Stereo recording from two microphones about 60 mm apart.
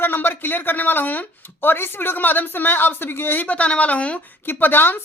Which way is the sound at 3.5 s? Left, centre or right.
Left.